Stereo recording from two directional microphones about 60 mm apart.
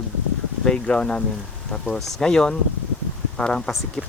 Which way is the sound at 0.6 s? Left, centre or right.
Centre.